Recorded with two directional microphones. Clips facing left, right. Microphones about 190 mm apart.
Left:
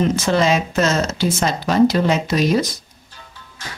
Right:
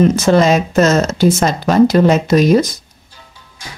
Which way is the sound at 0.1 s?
45° right (ahead or behind).